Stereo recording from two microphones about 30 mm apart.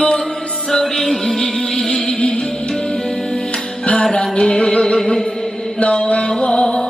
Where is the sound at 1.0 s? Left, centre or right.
Centre.